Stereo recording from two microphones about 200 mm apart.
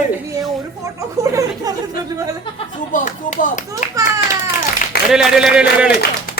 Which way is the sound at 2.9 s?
40° left (ahead or behind).